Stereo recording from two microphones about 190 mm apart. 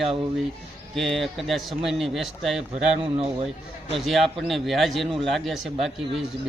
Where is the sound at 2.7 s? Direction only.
30° right (ahead or behind).